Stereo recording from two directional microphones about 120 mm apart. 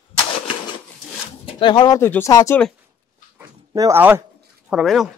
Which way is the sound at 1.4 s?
40° left (ahead or behind).